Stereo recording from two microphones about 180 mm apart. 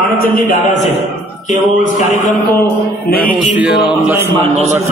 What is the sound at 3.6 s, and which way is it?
Music, 5° right (ahead or behind).